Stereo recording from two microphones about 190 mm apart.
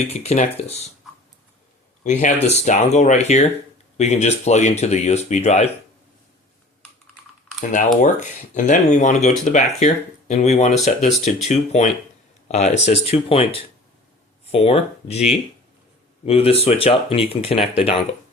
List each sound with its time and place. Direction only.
0.1 s speech: 35° left (ahead or behind)
2.0 s speech: 40° left (ahead or behind)
7.6 s speech: 45° left (ahead or behind)